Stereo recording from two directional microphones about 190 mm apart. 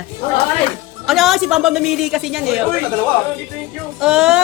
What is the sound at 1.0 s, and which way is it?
A woman's voice, centre (ahead or behind).